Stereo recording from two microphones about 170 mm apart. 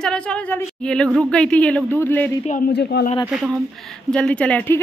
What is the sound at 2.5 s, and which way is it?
Speech, 65° left (ahead or behind).